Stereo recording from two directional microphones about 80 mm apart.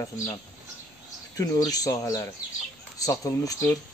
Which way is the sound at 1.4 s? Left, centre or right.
Left.